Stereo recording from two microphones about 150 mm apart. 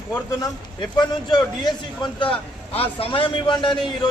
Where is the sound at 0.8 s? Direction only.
30° left (ahead or behind).